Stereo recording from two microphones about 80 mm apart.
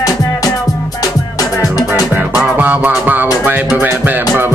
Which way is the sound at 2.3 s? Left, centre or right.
Right.